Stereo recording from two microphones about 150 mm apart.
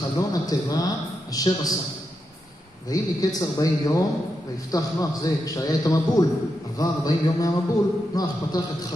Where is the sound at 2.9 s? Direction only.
25° left (ahead or behind).